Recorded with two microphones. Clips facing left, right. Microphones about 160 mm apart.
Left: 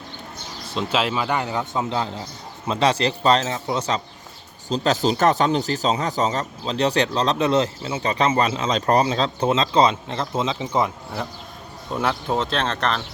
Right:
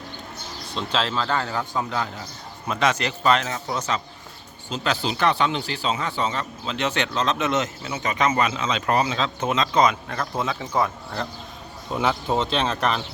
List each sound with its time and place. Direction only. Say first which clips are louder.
0.7 s a man's voice: left 3 dB; 5° left (ahead or behind)
11.9 s speech: even; centre (ahead or behind)